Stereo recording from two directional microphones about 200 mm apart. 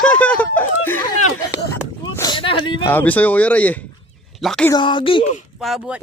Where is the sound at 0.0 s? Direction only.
5° left (ahead or behind).